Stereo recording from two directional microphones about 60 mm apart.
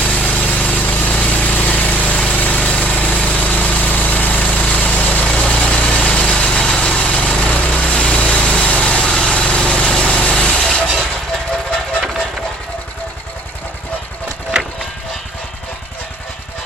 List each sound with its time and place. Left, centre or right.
0.0 s vehicle: left